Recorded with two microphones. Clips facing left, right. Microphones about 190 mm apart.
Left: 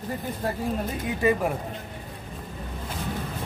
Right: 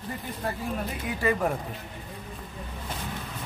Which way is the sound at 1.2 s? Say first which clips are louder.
Left 4 dB; 20° left (ahead or behind).